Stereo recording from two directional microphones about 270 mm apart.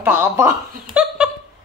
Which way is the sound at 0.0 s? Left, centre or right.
Centre.